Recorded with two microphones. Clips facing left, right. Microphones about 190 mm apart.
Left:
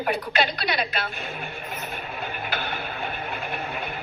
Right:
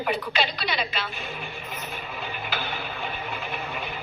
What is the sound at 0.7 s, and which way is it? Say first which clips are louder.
Music: left 2 dB; 50° left (ahead or behind).